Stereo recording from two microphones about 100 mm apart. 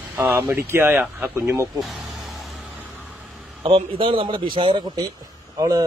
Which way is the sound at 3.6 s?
65° right (ahead or behind).